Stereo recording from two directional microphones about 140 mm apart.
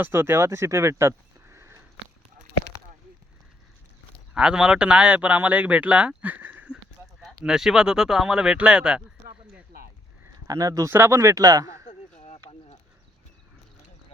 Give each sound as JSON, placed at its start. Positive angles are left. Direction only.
{"t": 0.0, "sound": "speech", "side_deg": -15}
{"t": 4.4, "sound": "speech", "side_deg": -5}
{"t": 10.3, "sound": "speech", "side_deg": -25}
{"t": 11.9, "sound": "a sound", "side_deg": 55}